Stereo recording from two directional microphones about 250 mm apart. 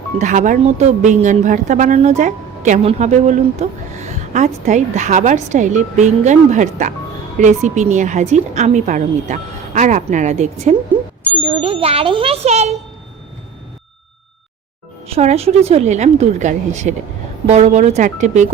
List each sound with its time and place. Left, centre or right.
0.2 s a woman's voice: right
15.0 s a woman's voice: right